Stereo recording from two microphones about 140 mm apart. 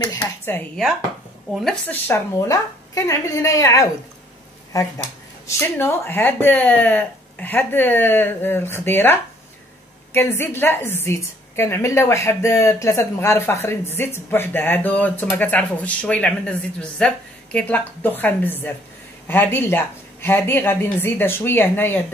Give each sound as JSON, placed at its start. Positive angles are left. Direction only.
{"t": 0.0, "sound": "speech", "side_deg": 25}
{"t": 1.5, "sound": "a woman's voice", "side_deg": 0}
{"t": 1.9, "sound": "a woman's voice", "side_deg": 20}
{"t": 5.5, "sound": "a woman's voice", "side_deg": 15}